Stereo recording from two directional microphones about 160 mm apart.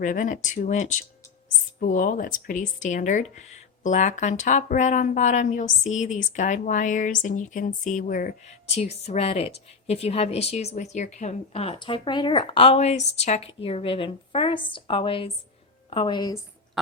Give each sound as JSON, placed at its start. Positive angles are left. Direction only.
{"t": 0.0, "sound": "speech", "side_deg": 50}
{"t": 8.7, "sound": "a woman's voice", "side_deg": 40}
{"t": 16.8, "sound": "pig", "side_deg": 0}